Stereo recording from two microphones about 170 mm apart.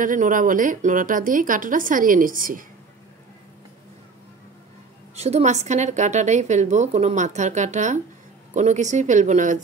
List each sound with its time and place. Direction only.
0.0 s a woman's voice: 50° right (ahead or behind)
5.1 s a woman's voice: 40° right (ahead or behind)